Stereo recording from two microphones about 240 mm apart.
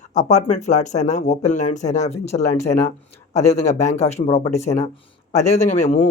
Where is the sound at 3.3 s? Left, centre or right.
Left.